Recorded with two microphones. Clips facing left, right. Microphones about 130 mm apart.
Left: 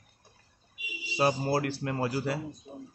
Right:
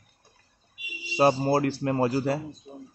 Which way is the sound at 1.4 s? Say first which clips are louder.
Right 5 dB; 25° right (ahead or behind).